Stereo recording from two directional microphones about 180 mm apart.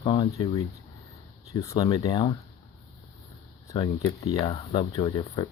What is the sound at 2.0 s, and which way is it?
Speech, 25° left (ahead or behind).